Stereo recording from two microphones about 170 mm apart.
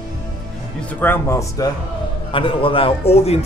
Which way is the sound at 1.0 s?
15° left (ahead or behind).